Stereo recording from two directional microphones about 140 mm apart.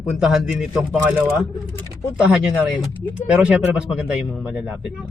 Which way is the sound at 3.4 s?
10° right (ahead or behind).